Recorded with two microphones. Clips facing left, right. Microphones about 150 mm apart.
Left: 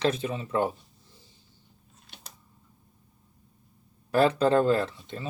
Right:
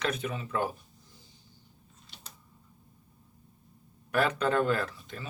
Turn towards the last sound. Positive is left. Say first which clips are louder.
# left 5 dB
turn(degrees=25)  # may be behind; listen again after turning